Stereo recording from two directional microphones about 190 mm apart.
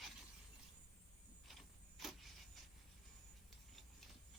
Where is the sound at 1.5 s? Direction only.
Centre (ahead or behind).